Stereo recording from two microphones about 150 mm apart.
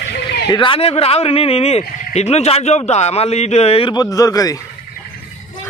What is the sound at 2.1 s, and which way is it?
Speech, 45° left (ahead or behind).